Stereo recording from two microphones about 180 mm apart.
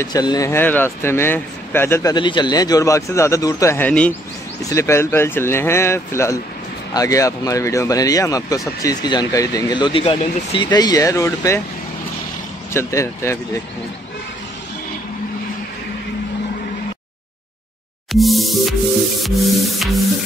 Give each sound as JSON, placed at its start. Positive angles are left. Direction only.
{"t": 0.0, "sound": "speech", "side_deg": 20}
{"t": 12.7, "sound": "speech", "side_deg": 15}
{"t": 18.1, "sound": "music", "side_deg": 0}